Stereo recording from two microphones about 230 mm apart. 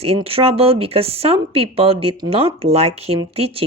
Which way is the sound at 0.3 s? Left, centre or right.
Right.